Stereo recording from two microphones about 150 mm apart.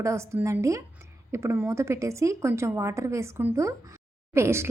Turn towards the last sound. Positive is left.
turn(degrees=-15)  # may be behind; listen again after turning